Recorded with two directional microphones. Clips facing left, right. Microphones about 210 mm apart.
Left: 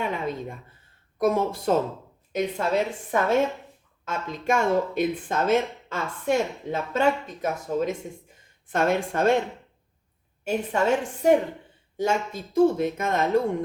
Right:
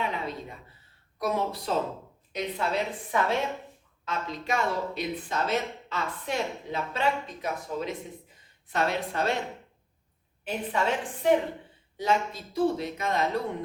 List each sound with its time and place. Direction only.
0.0 s a sound: 50° left (ahead or behind)
1.2 s speech: 50° left (ahead or behind)
10.4 s speech: 45° left (ahead or behind)